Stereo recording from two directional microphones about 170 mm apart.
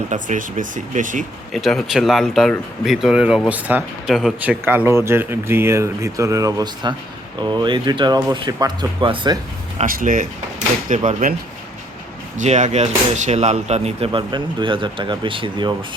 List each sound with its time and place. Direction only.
0.1 s speech: 50° right (ahead or behind)
1.5 s speech: centre (ahead or behind); by 9.4 s 30° right (ahead or behind)
9.8 s speech: 55° right (ahead or behind)
12.4 s speech: 45° right (ahead or behind); by 15.7 s 30° right (ahead or behind)